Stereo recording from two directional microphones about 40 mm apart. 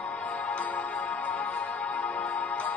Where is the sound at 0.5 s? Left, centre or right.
Left.